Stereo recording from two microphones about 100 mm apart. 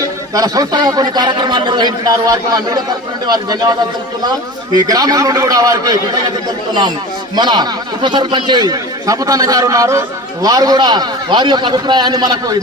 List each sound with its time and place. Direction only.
0.3 s a man's voice: 35° right (ahead or behind)
7.3 s a man's voice: 45° right (ahead or behind)